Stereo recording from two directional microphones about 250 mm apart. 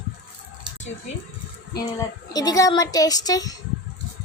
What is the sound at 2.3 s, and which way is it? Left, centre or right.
A woman's voice, centre.